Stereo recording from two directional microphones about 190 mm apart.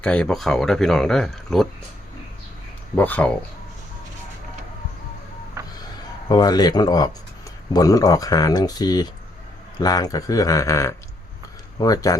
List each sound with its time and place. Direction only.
0.0 s speech: 5° left (ahead or behind)
2.9 s speech: 10° left (ahead or behind)
6.2 s speech: 20° left (ahead or behind)